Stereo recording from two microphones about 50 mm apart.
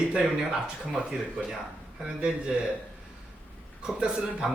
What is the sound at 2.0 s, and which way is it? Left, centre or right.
Speech, centre.